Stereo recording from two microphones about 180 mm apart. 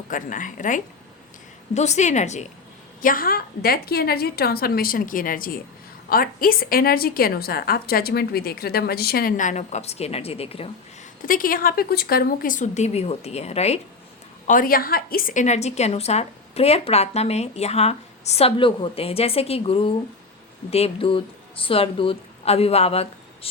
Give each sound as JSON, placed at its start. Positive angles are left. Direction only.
{"t": 0.1, "sound": "a woman's voice", "side_deg": 45}
{"t": 3.0, "sound": "a woman's voice", "side_deg": 50}
{"t": 11.2, "sound": "speech", "side_deg": 50}
{"t": 14.4, "sound": "a woman's voice", "side_deg": 50}